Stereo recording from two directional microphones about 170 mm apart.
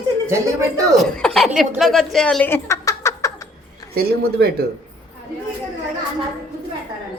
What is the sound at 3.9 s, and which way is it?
Speech, 65° right (ahead or behind).